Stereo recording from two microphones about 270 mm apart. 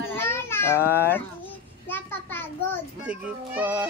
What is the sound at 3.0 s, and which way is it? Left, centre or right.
Speech, centre.